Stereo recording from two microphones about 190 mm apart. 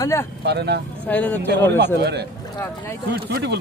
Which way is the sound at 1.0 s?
10° left (ahead or behind).